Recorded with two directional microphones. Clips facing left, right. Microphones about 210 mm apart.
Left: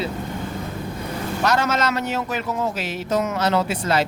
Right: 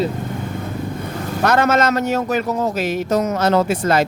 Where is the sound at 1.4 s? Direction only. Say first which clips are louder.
Right 6 dB; 55° right (ahead or behind).